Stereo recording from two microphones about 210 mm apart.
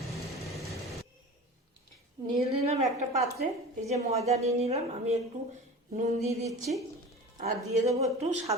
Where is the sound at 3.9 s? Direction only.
30° right (ahead or behind).